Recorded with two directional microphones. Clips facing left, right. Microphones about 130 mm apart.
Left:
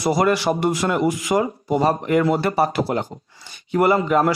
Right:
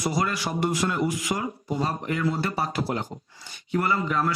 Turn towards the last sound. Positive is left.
turn(degrees=70)  # may be behind; listen again after turning